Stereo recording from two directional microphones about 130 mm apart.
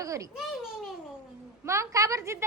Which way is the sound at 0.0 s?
25° right (ahead or behind).